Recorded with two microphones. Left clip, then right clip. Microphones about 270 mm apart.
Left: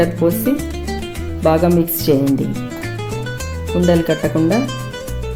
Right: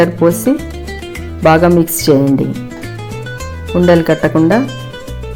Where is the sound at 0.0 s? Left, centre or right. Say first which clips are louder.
Right 5 dB; right.